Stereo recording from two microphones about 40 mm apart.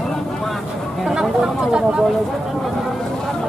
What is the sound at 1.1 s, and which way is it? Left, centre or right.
Speech, centre.